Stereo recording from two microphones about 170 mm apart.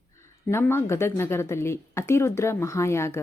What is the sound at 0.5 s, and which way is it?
A woman's voice, 15° left (ahead or behind).